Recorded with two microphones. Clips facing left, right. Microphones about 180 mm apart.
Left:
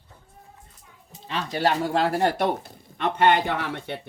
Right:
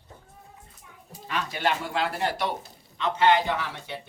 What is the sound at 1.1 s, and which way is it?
Speech, 30° left (ahead or behind).